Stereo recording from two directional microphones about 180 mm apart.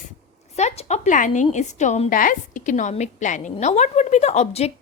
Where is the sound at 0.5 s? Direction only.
40° left (ahead or behind).